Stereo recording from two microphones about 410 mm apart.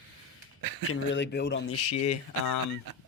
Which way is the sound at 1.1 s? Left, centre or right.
Left.